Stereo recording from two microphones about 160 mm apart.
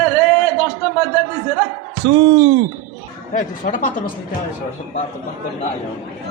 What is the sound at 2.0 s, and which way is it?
Speech, 35° right (ahead or behind).